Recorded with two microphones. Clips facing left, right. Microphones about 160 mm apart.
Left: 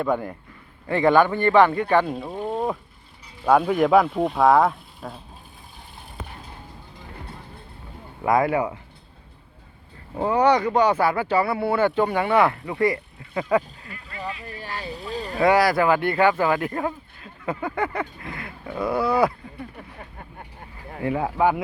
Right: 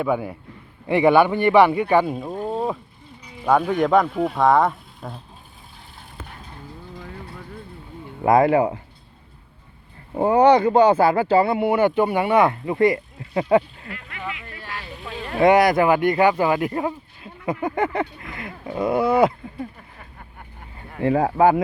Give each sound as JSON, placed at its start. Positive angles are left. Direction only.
{"t": 0.0, "sound": "speech", "side_deg": -5}
{"t": 8.2, "sound": "speech", "side_deg": -25}
{"t": 10.2, "sound": "speech", "side_deg": -30}
{"t": 14.1, "sound": "a sound", "side_deg": 35}
{"t": 14.7, "sound": "vehicle", "side_deg": 35}
{"t": 15.4, "sound": "speech", "side_deg": -20}
{"t": 17.4, "sound": "a sound", "side_deg": -15}
{"t": 17.7, "sound": "speech", "side_deg": -20}
{"t": 21.0, "sound": "speech", "side_deg": -35}